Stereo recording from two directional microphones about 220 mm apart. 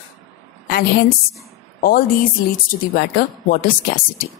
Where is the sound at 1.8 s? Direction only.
40° left (ahead or behind).